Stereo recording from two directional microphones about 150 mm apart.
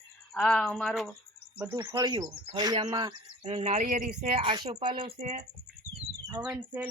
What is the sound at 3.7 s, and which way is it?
Speech, 55° right (ahead or behind).